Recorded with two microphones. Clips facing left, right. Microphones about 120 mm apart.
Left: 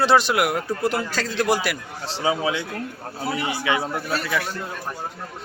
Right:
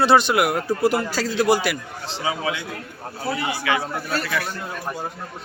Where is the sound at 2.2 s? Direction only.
25° left (ahead or behind).